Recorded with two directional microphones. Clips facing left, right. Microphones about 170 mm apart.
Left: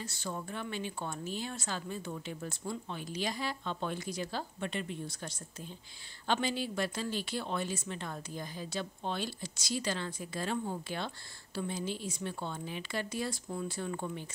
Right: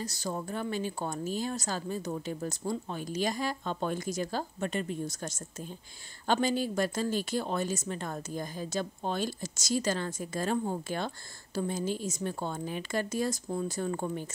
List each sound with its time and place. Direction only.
0.0 s speech: 40° right (ahead or behind)